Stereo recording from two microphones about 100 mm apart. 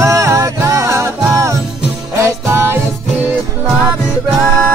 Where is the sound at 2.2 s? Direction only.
25° right (ahead or behind).